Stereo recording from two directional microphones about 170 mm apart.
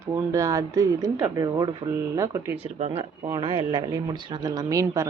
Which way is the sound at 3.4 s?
30° right (ahead or behind).